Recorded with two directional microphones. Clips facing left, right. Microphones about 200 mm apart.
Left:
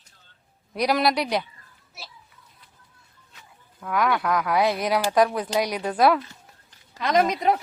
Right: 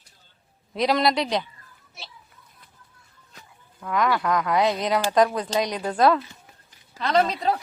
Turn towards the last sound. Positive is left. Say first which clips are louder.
# left 1 dB
turn(degrees=15)  # may be behind; listen again after turning